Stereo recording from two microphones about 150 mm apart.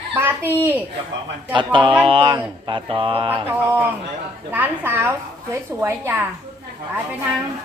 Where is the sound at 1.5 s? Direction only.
35° right (ahead or behind).